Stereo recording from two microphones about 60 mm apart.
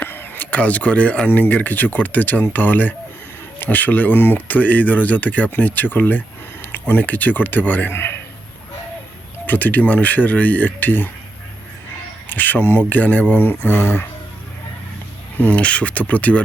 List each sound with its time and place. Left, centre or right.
0.0 s a sound: left
0.5 s speech: left
9.5 s speech: left
12.3 s speech: left
15.4 s speech: left